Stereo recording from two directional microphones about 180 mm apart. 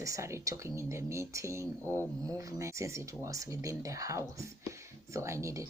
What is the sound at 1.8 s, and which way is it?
Speech, 10° left (ahead or behind).